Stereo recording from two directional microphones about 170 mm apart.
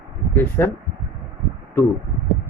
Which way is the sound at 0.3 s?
15° left (ahead or behind).